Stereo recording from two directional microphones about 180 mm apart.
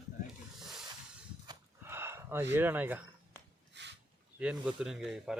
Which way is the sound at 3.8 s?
75° right (ahead or behind).